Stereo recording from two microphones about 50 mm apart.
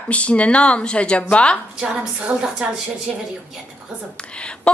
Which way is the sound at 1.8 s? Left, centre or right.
Centre.